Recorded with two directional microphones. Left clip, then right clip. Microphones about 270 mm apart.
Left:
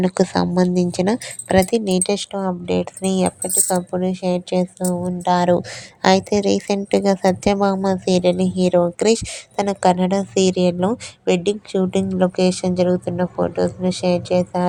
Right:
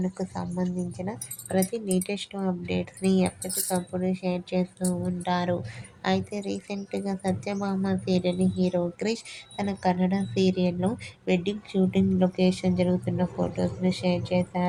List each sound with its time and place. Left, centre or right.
0.0 s a woman's voice: left